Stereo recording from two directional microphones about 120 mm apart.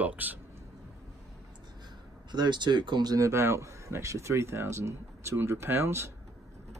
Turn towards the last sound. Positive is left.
turn(degrees=-20)  # may be behind; listen again after turning